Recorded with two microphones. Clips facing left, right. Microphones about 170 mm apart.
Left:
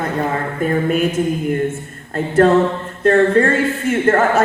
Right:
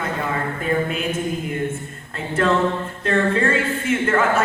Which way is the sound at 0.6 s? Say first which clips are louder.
Left 5 dB; 45° left (ahead or behind).